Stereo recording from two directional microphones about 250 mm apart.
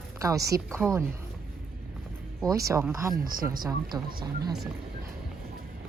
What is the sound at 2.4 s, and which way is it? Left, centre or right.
Speech, centre.